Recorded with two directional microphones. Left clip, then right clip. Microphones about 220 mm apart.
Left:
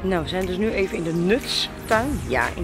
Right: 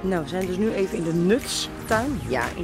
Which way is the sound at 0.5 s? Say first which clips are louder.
Even; 20° right (ahead or behind).